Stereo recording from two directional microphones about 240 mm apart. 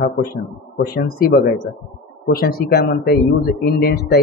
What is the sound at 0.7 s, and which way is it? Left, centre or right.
Speech, left.